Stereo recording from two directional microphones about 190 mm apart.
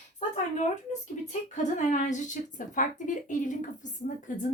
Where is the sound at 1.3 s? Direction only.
40° left (ahead or behind).